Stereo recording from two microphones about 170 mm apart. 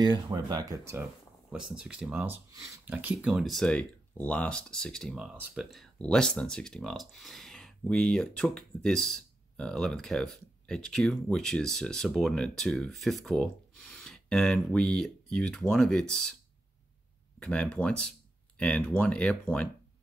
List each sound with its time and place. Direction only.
0.0 s speech: 25° right (ahead or behind)
1.5 s speech: 5° right (ahead or behind)
17.4 s speech: 5° left (ahead or behind)